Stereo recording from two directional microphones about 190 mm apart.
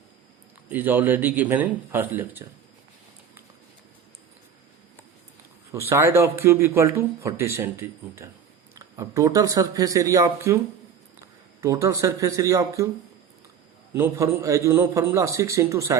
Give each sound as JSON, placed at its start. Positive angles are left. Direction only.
{"t": 0.7, "sound": "speech", "side_deg": -10}
{"t": 5.9, "sound": "speech", "side_deg": -15}
{"t": 11.6, "sound": "speech", "side_deg": -15}
{"t": 13.9, "sound": "speech", "side_deg": -15}